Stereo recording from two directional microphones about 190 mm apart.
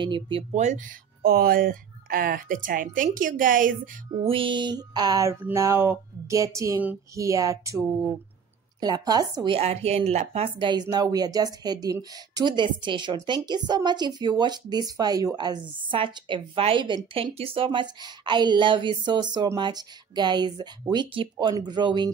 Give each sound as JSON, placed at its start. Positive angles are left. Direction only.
{"t": 0.0, "sound": "speech", "side_deg": -25}
{"t": 4.1, "sound": "speech", "side_deg": -30}
{"t": 8.8, "sound": "speech", "side_deg": -20}